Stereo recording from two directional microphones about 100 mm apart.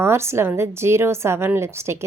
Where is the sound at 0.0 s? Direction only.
25° right (ahead or behind).